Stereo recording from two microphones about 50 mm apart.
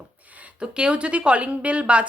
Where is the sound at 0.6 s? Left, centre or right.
Centre.